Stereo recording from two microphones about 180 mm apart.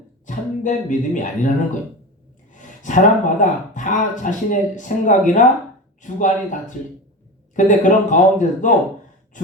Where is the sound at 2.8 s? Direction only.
45° left (ahead or behind).